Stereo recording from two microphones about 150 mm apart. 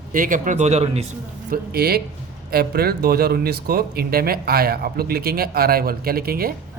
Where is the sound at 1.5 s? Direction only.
90° right.